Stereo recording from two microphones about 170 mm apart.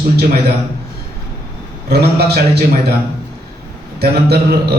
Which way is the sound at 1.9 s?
70° right (ahead or behind).